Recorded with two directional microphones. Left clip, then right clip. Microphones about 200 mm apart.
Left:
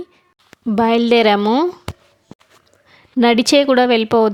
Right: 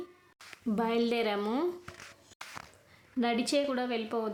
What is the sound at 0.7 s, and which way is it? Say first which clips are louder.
Speech: left 16 dB; 50° left (ahead or behind).